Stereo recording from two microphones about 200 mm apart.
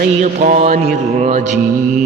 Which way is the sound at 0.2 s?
35° right (ahead or behind).